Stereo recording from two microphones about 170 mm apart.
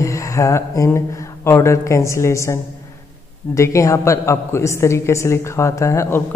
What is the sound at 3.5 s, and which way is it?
A man's voice, 20° left (ahead or behind).